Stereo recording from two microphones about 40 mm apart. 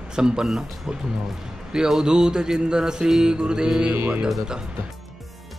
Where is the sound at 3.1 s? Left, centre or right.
Centre.